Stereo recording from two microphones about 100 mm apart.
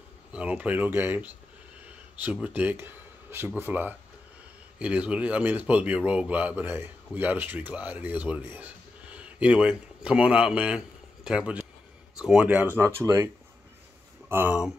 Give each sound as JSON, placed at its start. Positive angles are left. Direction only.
{"t": 0.3, "sound": "speech", "side_deg": -15}
{"t": 12.8, "sound": "speech", "side_deg": -30}
{"t": 14.3, "sound": "speech", "side_deg": -20}